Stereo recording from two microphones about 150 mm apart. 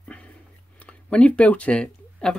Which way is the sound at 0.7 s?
10° left (ahead or behind).